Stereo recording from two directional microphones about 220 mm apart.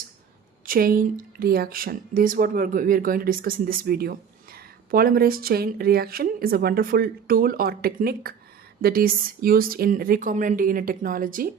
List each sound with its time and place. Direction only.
0.6 s speech: 40° right (ahead or behind)